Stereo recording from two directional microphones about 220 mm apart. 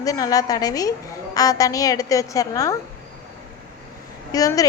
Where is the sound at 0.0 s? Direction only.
15° left (ahead or behind).